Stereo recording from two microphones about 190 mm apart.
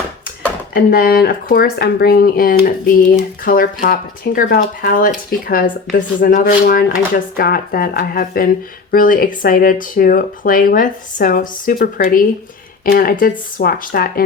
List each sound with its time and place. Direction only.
0.7 s speech: 55° left (ahead or behind)